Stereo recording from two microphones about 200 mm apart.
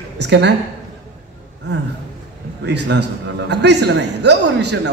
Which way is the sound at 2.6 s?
60° right (ahead or behind).